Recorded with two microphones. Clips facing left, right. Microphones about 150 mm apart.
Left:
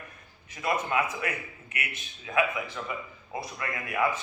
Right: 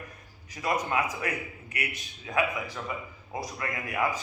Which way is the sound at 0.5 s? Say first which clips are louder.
Even; 35° right (ahead or behind).